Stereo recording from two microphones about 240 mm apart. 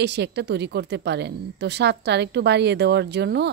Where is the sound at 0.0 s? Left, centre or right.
Right.